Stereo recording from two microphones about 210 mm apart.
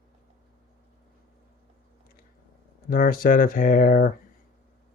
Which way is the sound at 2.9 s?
45° left (ahead or behind).